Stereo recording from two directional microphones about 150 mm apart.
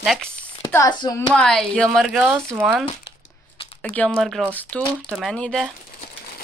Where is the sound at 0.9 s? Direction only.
30° left (ahead or behind).